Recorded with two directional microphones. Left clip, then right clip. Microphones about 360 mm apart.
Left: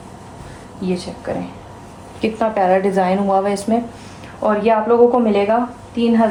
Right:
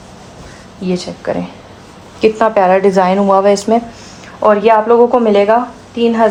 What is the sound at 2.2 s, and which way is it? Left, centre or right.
A woman's voice, right.